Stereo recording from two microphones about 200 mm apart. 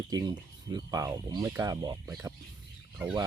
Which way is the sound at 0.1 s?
20° right (ahead or behind).